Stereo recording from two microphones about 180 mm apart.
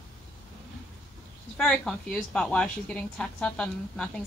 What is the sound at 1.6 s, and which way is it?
A woman's voice, 5° left (ahead or behind).